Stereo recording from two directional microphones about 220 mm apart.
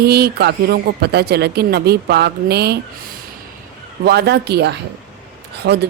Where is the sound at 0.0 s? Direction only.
45° right (ahead or behind).